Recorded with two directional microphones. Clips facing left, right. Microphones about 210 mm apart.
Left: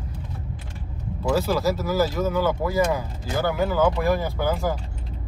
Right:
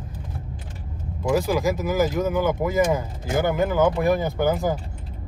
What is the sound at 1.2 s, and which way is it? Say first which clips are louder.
A man's voice: right 1 dB; 15° right (ahead or behind).